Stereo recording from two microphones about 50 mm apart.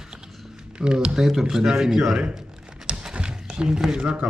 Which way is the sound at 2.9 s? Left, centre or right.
Centre.